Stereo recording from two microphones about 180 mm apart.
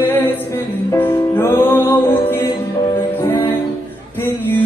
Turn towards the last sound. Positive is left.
turn(degrees=10)  # may be behind; listen again after turning